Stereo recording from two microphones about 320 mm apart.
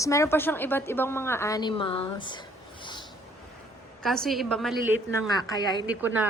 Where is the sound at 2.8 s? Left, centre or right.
Centre.